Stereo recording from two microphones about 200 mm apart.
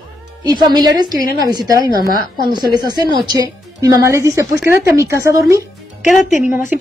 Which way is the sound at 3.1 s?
20° right (ahead or behind).